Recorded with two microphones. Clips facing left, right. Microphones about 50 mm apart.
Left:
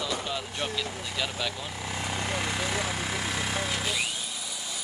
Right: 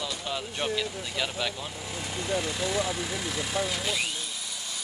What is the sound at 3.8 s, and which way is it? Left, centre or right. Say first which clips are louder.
Speech: even; centre.